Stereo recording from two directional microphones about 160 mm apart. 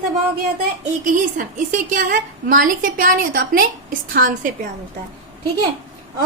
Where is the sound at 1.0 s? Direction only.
55° right (ahead or behind).